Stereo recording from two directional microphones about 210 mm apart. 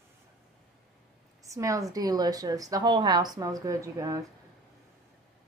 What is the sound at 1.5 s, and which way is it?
A woman's voice, 15° right (ahead or behind).